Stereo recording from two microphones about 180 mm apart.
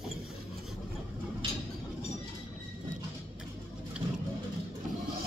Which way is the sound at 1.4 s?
30° right (ahead or behind).